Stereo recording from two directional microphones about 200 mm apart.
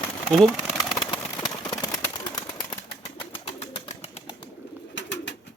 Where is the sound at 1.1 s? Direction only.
20° left (ahead or behind).